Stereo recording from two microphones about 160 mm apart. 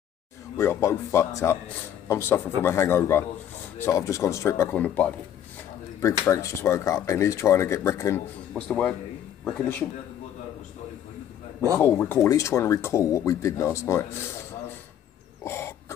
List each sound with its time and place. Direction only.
0.6 s speech: 15° left (ahead or behind)
6.2 s speech: 15° left (ahead or behind)
11.8 s speech: 15° left (ahead or behind)
15.4 s a sound: 15° left (ahead or behind)